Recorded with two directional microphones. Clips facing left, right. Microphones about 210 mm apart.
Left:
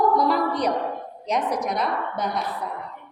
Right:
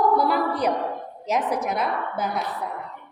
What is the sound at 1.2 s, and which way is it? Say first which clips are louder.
A woman's voice: even; 5° right (ahead or behind).